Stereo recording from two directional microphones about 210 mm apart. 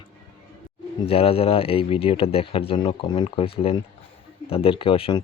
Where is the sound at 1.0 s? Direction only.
25° left (ahead or behind).